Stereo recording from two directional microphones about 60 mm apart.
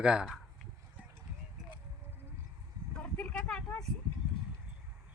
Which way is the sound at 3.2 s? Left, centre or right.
Left.